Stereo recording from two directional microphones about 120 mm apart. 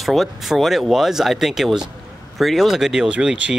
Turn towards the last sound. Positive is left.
turn(degrees=-5)  # may be behind; listen again after turning